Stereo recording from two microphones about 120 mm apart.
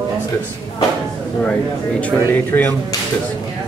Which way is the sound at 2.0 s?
15° left (ahead or behind).